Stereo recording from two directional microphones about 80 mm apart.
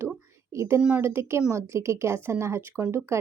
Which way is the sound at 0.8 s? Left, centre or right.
Centre.